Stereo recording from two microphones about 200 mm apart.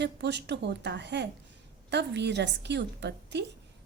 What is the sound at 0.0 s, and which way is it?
A woman's voice, 60° right (ahead or behind).